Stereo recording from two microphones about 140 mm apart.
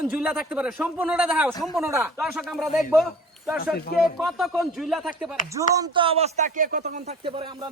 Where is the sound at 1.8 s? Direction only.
20° right (ahead or behind).